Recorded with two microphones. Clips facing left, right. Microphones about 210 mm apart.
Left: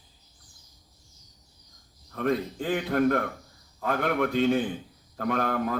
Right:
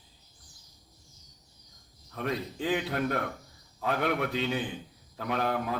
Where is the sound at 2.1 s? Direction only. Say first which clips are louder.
Left 6 dB; 50° left (ahead or behind).